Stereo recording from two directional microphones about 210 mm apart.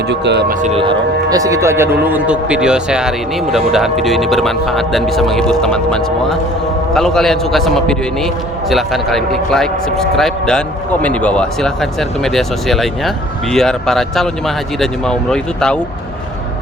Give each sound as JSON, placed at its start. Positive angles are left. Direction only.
{"t": 0.1, "sound": "speech", "side_deg": -55}
{"t": 0.6, "sound": "speech", "side_deg": -25}